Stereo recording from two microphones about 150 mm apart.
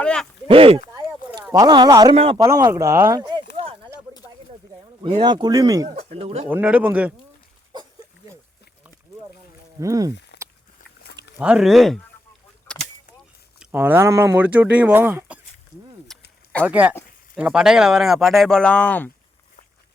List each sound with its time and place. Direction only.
0.0 s speech: 5° left (ahead or behind)
0.4 s speech: 40° right (ahead or behind)
1.5 s speech: 30° right (ahead or behind)
2.1 s speech: 40° right (ahead or behind)
2.4 s speech: 20° right (ahead or behind)
3.2 s a sound: 30° right (ahead or behind)
5.2 s speech: 30° right (ahead or behind)
6.0 s speech: 45° right (ahead or behind)
6.5 s speech: 10° right (ahead or behind)
9.8 s speech: 20° right (ahead or behind)
11.3 s speech: 5° right (ahead or behind)
13.7 s speech: 15° right (ahead or behind)
16.1 s a sound: 5° left (ahead or behind)
16.6 s speech: 10° right (ahead or behind); by 19.1 s 10° left (ahead or behind)